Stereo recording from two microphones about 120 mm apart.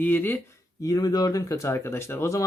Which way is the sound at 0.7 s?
30° left (ahead or behind).